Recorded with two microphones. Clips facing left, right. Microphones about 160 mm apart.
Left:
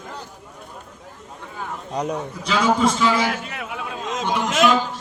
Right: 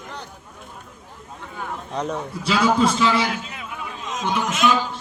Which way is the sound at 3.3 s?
65° left (ahead or behind).